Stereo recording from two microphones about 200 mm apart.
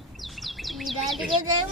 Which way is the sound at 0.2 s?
Centre (ahead or behind).